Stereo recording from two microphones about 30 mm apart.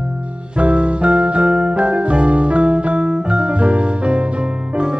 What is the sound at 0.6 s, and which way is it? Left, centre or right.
Music, right.